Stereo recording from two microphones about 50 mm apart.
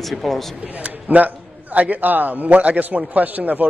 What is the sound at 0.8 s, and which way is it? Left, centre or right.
A man's voice, right.